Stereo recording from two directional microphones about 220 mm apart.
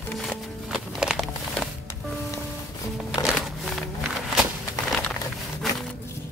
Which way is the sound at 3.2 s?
Centre (ahead or behind).